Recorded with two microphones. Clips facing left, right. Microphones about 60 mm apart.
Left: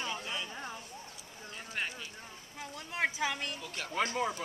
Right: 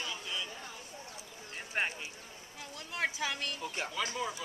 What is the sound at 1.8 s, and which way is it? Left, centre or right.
Speech, right.